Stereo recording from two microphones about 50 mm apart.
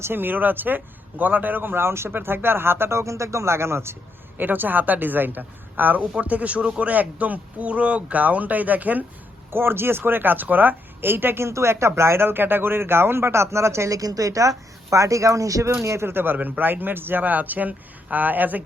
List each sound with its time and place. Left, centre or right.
0.0 s a woman's voice: right
4.4 s a woman's voice: right
9.5 s speech: right
11.4 s speech: right
12.2 s speech: right
15.8 s speech: right
16.1 s a woman's voice: right